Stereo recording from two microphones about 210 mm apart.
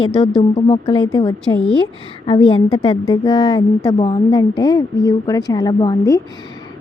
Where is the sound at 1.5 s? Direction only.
5° left (ahead or behind).